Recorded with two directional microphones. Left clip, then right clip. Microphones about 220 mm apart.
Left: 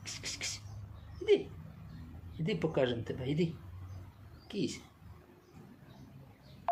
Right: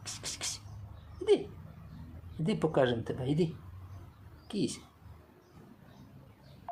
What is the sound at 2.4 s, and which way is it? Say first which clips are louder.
Speech: right 3 dB; 30° right (ahead or behind).